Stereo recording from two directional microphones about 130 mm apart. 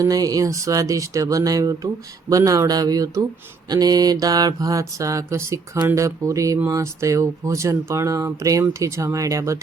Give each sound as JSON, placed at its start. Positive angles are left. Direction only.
{"t": 0.0, "sound": "mantra", "side_deg": -25}